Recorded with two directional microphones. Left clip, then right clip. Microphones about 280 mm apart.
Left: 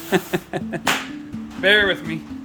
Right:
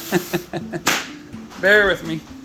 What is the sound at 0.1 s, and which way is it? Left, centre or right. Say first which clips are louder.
Speech: left 1 dB; left.